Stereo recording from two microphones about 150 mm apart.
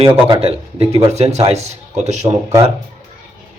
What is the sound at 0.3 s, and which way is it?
A man's voice, 40° right (ahead or behind).